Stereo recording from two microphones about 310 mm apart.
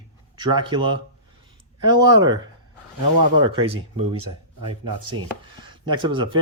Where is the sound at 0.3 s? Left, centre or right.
Centre.